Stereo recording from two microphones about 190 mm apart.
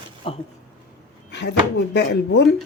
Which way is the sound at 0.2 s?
30° left (ahead or behind).